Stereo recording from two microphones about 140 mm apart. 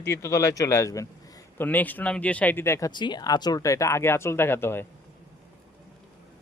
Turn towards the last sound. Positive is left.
turn(degrees=15)  # may be behind; listen again after turning